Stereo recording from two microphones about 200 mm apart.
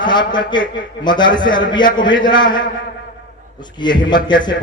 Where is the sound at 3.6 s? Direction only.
20° left (ahead or behind).